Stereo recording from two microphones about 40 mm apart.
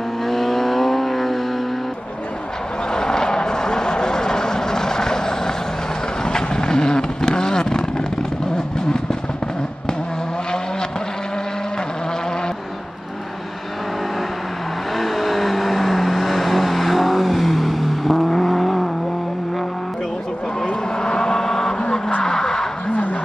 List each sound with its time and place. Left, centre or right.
0.2 s vehicle: centre
2.9 s vehicle: centre
15.0 s vehicle: centre
21.0 s vehicle: centre
22.2 s a sound: centre
22.8 s a sound: left